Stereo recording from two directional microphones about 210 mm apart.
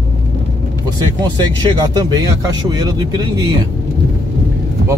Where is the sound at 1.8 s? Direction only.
20° right (ahead or behind).